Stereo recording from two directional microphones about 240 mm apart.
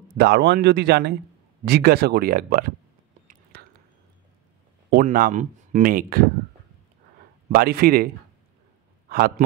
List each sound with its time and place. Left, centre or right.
0.2 s a man's voice: right
4.9 s speech: right
7.4 s speech: right